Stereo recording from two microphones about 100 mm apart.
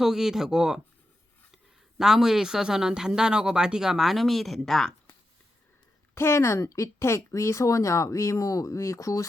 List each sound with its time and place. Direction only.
0.0 s speech: 5° right (ahead or behind)
2.0 s speech: 5° right (ahead or behind)
6.1 s speech: 25° left (ahead or behind)